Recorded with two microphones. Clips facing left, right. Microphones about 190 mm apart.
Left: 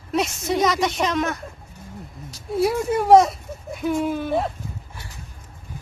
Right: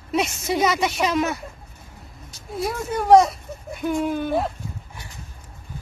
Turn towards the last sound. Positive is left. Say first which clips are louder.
# even
turn(degrees=0)  # may be behind; listen again after turning